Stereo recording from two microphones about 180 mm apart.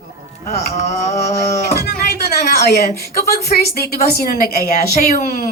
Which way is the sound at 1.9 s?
55° left (ahead or behind).